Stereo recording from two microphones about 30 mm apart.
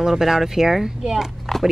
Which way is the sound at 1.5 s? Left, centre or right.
Centre.